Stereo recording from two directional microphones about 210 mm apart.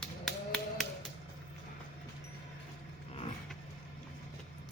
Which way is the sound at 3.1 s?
30° left (ahead or behind).